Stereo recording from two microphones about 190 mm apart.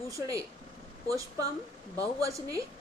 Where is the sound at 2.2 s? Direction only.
15° right (ahead or behind).